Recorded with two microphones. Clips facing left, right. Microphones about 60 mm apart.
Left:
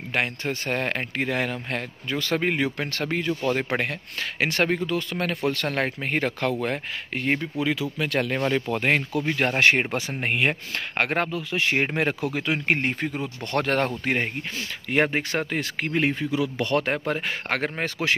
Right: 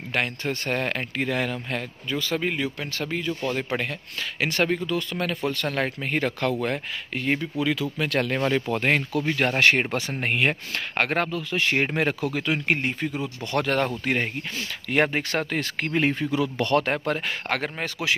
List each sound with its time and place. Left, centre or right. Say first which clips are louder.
0.1 s speech: even; centre
2.1 s speech: left 2 dB; left; by 7.9 s centre
8.0 s speech: even; centre
8.8 s speech: left 1 dB; left
9.2 s speech: even; centre
12.7 s speech: left 1 dB; left
14.9 s speech: even; centre
17.5 s speech: left 2 dB; left